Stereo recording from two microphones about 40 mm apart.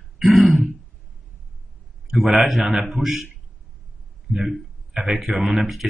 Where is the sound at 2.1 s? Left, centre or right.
Centre.